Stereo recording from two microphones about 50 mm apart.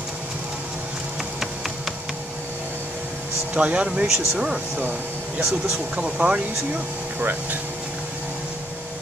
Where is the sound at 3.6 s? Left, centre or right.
Right.